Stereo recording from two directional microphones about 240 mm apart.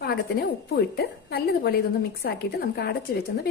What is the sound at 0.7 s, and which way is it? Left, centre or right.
A woman's voice, left.